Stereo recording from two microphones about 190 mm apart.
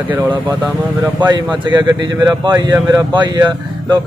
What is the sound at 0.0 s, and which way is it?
Speech, 10° right (ahead or behind).